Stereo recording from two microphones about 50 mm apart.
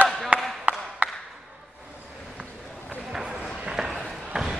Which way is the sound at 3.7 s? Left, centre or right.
Centre.